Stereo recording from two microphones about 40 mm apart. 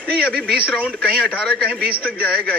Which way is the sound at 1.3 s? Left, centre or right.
Left.